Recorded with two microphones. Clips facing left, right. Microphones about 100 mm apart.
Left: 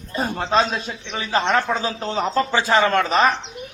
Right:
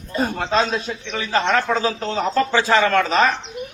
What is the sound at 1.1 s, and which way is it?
Speech, 25° left (ahead or behind).